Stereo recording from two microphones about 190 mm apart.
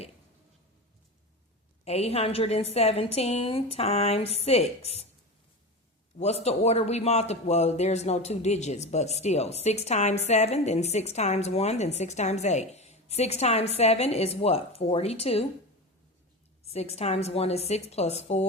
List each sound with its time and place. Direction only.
1.8 s speech: 35° left (ahead or behind)
6.1 s speech: 35° left (ahead or behind)
16.6 s speech: 35° left (ahead or behind)